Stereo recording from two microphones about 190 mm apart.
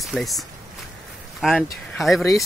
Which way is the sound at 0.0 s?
Centre (ahead or behind).